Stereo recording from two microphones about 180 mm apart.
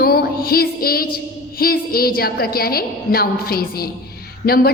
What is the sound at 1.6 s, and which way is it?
A woman's voice, 55° left (ahead or behind).